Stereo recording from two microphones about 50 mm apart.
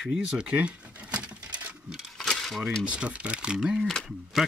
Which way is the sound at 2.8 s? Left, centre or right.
Right.